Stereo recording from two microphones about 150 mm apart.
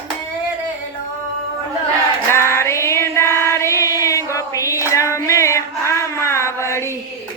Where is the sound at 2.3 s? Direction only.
15° left (ahead or behind).